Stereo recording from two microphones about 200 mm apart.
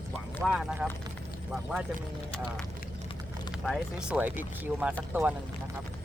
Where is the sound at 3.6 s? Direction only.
Centre (ahead or behind).